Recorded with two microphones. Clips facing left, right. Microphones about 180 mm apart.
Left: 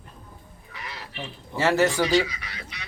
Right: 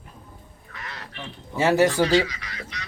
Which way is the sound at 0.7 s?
5° left (ahead or behind).